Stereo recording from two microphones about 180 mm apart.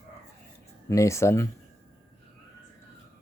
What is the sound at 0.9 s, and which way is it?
Speech, 15° left (ahead or behind).